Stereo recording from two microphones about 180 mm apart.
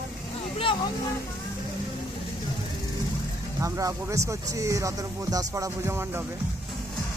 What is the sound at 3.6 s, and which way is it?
Speech, 20° right (ahead or behind).